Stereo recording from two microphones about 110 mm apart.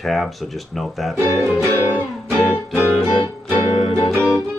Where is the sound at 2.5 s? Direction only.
15° left (ahead or behind).